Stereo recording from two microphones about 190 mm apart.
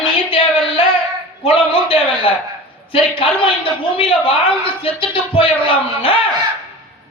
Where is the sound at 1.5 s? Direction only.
30° left (ahead or behind).